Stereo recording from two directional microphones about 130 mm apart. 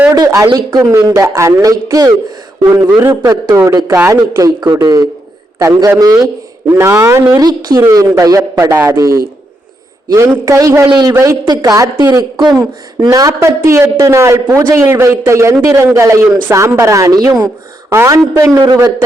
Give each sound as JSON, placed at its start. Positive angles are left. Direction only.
{"t": 0.1, "sound": "a woman's voice", "side_deg": -25}
{"t": 0.9, "sound": "a woman's voice", "side_deg": -20}
{"t": 10.8, "sound": "a woman's voice", "side_deg": -35}